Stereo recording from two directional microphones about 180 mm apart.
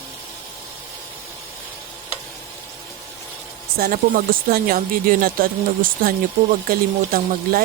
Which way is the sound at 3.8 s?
50° right (ahead or behind).